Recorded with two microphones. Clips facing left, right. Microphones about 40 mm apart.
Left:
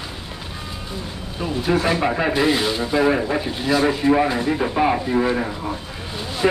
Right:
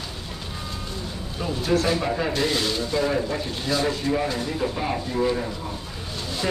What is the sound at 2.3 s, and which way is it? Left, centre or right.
Speech, centre.